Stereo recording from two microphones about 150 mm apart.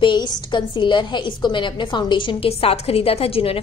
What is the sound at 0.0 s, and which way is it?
A woman's voice, 30° left (ahead or behind).